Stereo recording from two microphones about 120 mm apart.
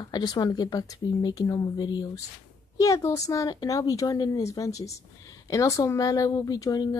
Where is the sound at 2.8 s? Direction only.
25° left (ahead or behind).